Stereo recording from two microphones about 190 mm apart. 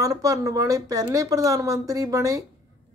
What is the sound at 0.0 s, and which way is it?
Speech, 15° right (ahead or behind).